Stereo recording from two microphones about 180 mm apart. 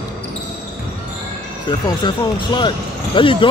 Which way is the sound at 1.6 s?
25° left (ahead or behind).